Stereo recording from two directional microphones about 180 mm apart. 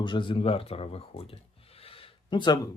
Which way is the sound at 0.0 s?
25° left (ahead or behind).